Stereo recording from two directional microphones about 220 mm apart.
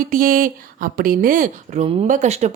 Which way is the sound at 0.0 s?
40° right (ahead or behind).